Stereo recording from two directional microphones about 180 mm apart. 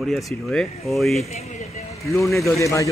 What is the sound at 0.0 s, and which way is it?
A man's voice, centre (ahead or behind).